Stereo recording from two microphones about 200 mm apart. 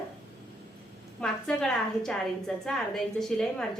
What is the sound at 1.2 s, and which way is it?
A woman's voice, 5° left (ahead or behind).